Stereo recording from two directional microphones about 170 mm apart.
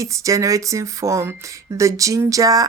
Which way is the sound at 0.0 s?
20° right (ahead or behind).